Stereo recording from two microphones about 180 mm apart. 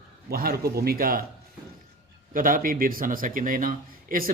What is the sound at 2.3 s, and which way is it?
Speech, 50° right (ahead or behind).